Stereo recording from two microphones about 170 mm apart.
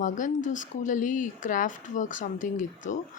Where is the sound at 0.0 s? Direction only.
50° left (ahead or behind).